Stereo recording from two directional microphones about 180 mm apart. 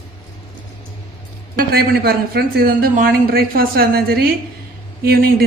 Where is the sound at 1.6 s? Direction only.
55° right (ahead or behind).